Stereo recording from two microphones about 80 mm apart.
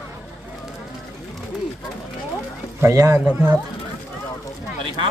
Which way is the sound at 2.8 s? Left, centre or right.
Right.